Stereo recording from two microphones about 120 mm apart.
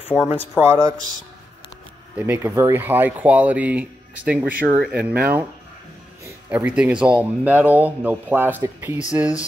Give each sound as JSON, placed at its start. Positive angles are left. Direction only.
{"t": 0.1, "sound": "speech", "side_deg": -10}
{"t": 2.1, "sound": "speech", "side_deg": -15}
{"t": 6.5, "sound": "speech", "side_deg": -10}